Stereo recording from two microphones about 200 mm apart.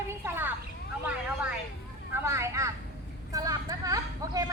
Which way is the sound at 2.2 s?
15° right (ahead or behind).